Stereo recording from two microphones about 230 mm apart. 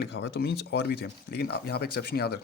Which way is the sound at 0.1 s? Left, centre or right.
Left.